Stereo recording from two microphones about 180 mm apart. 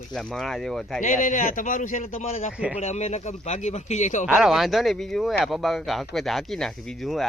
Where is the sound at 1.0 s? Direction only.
45° left (ahead or behind).